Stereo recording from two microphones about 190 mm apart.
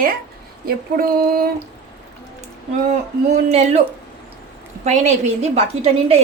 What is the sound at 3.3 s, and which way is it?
Speech, 35° right (ahead or behind).